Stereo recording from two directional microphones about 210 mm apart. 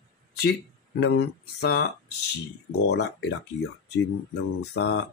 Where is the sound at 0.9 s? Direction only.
55° left (ahead or behind).